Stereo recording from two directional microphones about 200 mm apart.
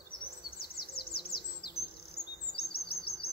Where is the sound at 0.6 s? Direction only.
50° left (ahead or behind).